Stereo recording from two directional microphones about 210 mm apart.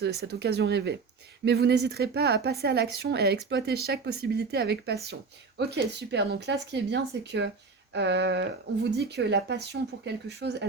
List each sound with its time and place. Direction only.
0.0 s a woman's voice: 50° right (ahead or behind)